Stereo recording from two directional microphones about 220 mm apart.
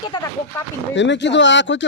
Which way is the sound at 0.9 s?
55° left (ahead or behind).